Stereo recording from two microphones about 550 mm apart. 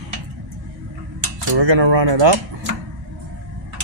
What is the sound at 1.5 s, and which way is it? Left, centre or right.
Speech, right.